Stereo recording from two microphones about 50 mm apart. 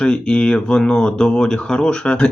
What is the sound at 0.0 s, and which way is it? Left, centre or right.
Speech, centre.